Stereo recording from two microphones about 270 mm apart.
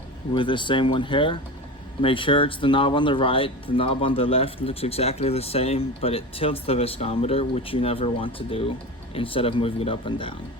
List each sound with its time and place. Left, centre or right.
0.3 s speech: centre